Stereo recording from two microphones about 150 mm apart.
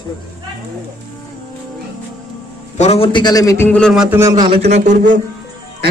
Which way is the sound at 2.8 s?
40° left (ahead or behind).